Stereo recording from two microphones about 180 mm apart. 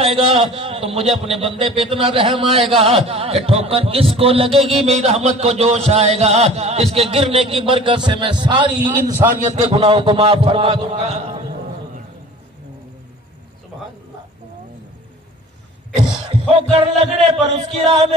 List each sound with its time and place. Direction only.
0.0 s a man's voice: 30° right (ahead or behind)
9.5 s speech: 35° right (ahead or behind)
16.0 s a man's voice: 30° right (ahead or behind)